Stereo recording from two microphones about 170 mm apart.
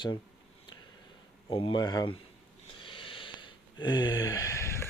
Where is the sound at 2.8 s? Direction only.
30° left (ahead or behind).